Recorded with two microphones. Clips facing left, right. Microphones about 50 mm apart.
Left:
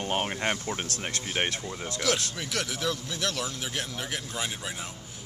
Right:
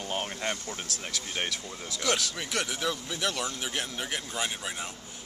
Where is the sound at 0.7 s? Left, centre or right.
Left.